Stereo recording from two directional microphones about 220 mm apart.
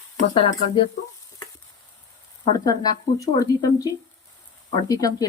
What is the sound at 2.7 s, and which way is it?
Speech, 15° left (ahead or behind).